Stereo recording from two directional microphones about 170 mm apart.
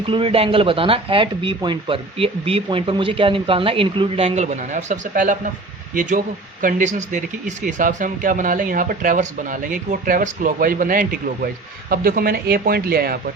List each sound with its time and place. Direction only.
0.1 s speech: 30° right (ahead or behind); by 13.1 s 60° right (ahead or behind)